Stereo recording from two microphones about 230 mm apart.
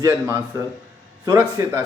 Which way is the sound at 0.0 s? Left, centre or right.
Centre.